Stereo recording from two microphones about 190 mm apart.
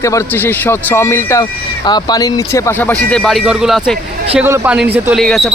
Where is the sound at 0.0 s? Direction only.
15° left (ahead or behind).